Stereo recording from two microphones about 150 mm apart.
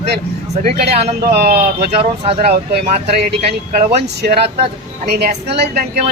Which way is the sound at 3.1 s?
90° right.